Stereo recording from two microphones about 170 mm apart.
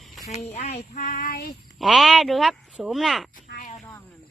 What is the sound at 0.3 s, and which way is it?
Speech, 40° left (ahead or behind).